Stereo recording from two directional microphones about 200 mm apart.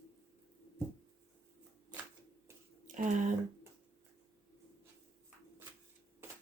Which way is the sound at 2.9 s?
40° right (ahead or behind).